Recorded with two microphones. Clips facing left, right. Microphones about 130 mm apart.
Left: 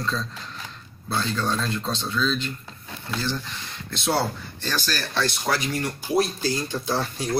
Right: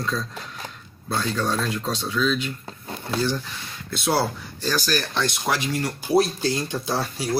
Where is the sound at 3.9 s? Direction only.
5° right (ahead or behind).